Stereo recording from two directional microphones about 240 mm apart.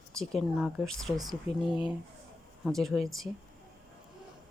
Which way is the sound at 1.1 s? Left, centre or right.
Centre.